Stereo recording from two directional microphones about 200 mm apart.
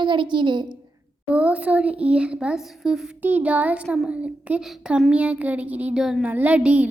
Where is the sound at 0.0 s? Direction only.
25° right (ahead or behind).